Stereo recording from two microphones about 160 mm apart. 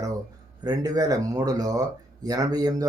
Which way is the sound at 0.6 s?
25° right (ahead or behind).